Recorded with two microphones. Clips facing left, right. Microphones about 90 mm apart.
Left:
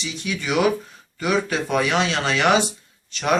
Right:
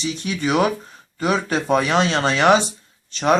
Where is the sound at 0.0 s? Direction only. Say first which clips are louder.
Right 5 dB; 40° right (ahead or behind).